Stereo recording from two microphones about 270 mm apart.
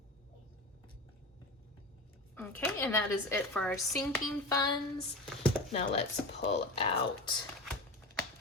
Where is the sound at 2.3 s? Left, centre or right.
Centre.